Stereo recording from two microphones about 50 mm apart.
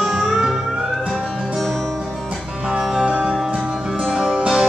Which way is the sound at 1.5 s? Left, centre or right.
Centre.